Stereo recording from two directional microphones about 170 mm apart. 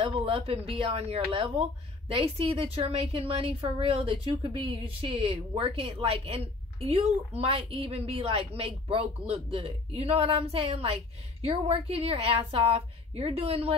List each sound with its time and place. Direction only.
0.0 s a woman's voice: 30° right (ahead or behind)